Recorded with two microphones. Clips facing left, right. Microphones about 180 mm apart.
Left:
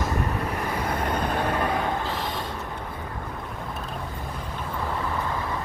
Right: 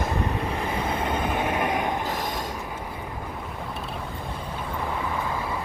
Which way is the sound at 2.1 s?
45° right (ahead or behind).